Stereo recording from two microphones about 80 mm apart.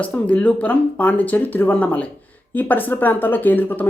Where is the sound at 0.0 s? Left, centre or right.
Centre.